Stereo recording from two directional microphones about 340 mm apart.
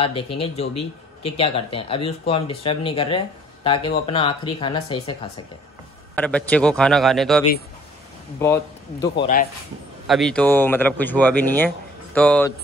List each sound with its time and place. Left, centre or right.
0.0 s speech: centre
6.1 s speech: centre
9.2 s speech: left
10.0 s speech: centre